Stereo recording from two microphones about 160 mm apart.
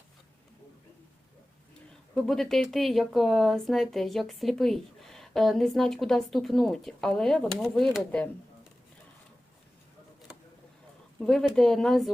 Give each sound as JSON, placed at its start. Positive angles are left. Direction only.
{"t": 2.1, "sound": "speech", "side_deg": 5}
{"t": 11.2, "sound": "speech", "side_deg": 5}